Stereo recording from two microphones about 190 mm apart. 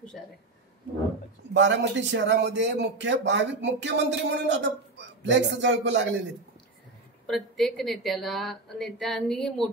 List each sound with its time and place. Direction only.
1.5 s a man's voice: 70° right (ahead or behind)
7.2 s speech: centre (ahead or behind)